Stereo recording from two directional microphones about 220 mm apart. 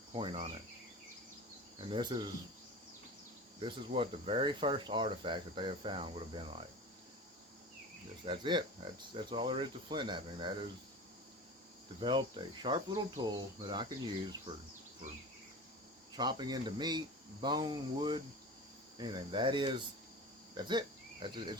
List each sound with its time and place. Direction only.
0.1 s cricket: 25° right (ahead or behind)
1.9 s speech: 20° right (ahead or behind)
3.6 s speech: 25° right (ahead or behind)
8.2 s speech: 20° right (ahead or behind)
11.9 s speech: 20° right (ahead or behind)
16.1 s speech: 20° right (ahead or behind)
20.7 s cricket: 20° right (ahead or behind)